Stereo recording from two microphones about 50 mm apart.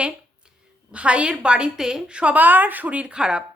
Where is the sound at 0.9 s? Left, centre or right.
Right.